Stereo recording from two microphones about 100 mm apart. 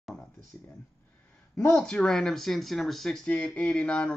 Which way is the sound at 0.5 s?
25° left (ahead or behind).